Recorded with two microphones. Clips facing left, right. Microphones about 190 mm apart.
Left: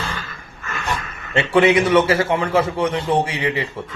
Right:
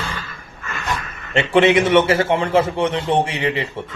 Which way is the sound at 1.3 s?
25° right (ahead or behind).